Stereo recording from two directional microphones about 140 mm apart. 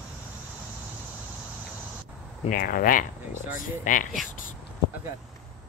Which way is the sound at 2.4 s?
80° left.